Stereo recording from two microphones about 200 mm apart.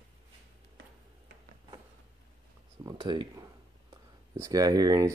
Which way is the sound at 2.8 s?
25° right (ahead or behind).